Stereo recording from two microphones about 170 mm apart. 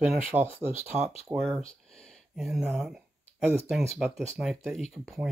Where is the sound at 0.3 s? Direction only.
15° right (ahead or behind).